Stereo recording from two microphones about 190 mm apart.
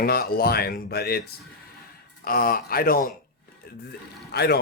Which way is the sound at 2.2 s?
50° left (ahead or behind).